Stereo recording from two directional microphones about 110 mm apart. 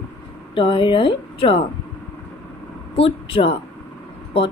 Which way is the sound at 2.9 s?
60° left (ahead or behind).